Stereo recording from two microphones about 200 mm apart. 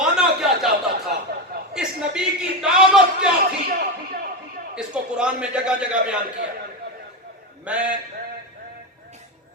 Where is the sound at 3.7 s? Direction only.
45° right (ahead or behind).